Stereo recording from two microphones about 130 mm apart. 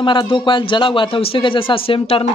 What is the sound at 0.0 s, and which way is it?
Speech, 35° left (ahead or behind).